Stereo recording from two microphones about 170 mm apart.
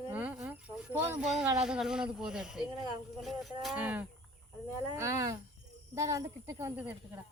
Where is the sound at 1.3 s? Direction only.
5° right (ahead or behind).